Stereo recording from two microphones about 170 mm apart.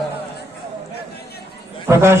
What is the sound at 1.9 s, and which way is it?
Speech, 15° right (ahead or behind).